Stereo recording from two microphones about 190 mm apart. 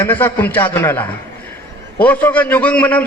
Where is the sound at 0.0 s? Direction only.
10° left (ahead or behind).